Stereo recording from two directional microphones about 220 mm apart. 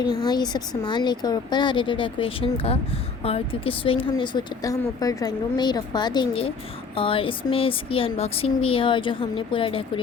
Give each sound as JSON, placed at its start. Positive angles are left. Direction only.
{"t": 0.0, "sound": "speech", "side_deg": 20}